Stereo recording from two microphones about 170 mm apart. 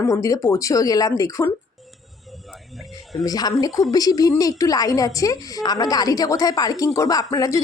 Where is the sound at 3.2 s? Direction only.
20° left (ahead or behind).